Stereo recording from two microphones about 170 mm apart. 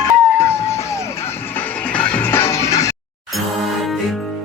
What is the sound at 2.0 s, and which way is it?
Music, 15° left (ahead or behind).